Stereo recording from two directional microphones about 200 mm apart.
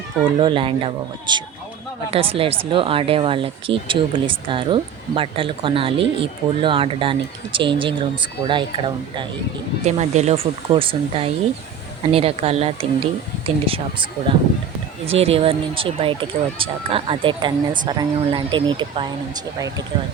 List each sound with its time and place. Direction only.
0.3 s speech: 25° right (ahead or behind)
9.8 s speech: 35° right (ahead or behind); by 19.8 s 15° right (ahead or behind)